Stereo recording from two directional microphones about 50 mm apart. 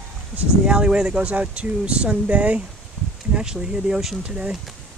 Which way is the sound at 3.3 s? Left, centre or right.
Centre.